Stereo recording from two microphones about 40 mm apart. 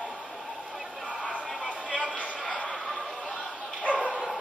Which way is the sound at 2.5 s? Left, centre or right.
Left.